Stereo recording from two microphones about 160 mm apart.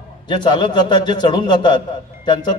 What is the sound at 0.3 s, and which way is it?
A man's voice, 30° left (ahead or behind).